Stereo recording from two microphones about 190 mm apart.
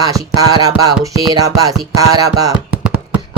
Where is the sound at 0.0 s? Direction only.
20° right (ahead or behind).